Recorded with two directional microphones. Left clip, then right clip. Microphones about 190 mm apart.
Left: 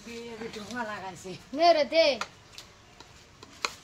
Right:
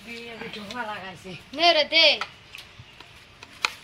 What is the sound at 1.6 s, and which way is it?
Speech, 50° left (ahead or behind).